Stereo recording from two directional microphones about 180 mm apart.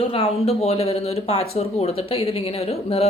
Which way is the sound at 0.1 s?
30° left (ahead or behind).